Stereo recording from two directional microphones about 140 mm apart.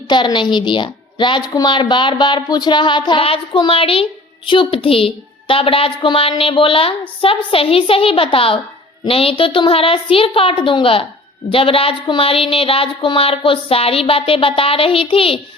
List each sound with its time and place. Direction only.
0.1 s a woman's voice: 35° left (ahead or behind)